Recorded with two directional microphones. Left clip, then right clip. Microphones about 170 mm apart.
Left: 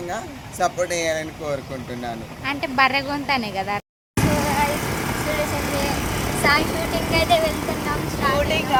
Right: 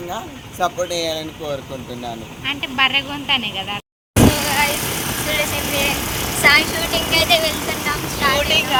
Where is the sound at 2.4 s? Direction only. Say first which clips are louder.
Right 1 dB; 35° left (ahead or behind).